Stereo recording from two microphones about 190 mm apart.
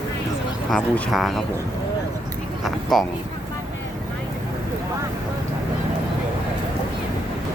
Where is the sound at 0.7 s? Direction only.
5° left (ahead or behind).